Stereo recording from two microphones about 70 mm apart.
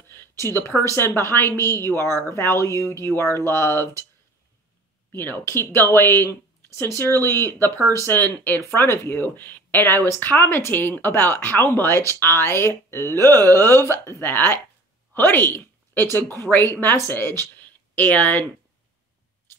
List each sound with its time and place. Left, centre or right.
0.2 s a sound: left
0.9 s speech: left
2.0 s speech: right
2.2 s speech: left
5.1 s speech: left
6.0 s speech: right
6.8 s a woman's voice: left